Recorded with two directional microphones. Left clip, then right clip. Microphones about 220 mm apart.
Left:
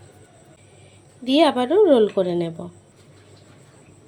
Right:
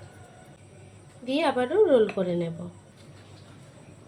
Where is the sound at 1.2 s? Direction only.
45° left (ahead or behind).